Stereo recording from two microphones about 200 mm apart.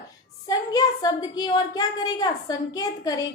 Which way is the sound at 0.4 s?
20° left (ahead or behind).